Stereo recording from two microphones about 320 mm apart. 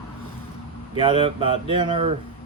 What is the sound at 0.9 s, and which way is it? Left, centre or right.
Speech, centre.